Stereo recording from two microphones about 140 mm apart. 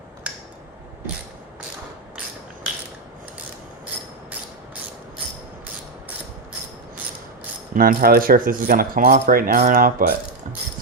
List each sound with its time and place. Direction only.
7.7 s speech: 90° right